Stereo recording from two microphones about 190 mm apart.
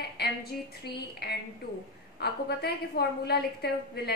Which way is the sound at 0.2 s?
60° left (ahead or behind).